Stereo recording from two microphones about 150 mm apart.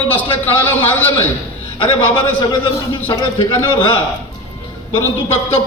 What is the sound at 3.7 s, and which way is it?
Speech, 35° left (ahead or behind).